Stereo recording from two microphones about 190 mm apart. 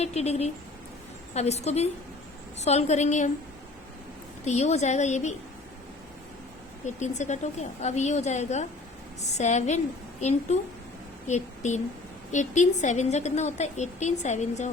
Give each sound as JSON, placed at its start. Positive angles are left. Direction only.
{"t": 0.0, "sound": "a woman's voice", "side_deg": 35}
{"t": 4.4, "sound": "a woman's voice", "side_deg": 35}
{"t": 6.8, "sound": "a woman's voice", "side_deg": 40}